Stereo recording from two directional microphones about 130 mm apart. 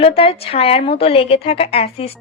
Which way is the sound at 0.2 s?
45° left (ahead or behind).